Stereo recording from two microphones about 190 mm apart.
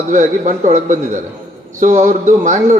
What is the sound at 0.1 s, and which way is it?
A man's voice, 40° right (ahead or behind).